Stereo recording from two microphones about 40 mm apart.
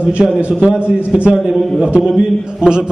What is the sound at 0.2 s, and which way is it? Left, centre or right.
Speech, right.